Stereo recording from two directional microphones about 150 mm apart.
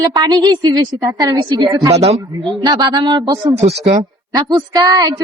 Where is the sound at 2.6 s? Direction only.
25° right (ahead or behind).